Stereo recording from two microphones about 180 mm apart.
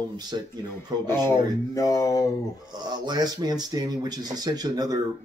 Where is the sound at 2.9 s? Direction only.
20° right (ahead or behind).